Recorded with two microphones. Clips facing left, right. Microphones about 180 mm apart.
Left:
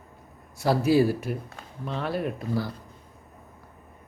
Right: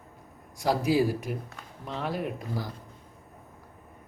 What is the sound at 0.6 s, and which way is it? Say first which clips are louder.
Speech: left 3 dB; 15° right (ahead or behind).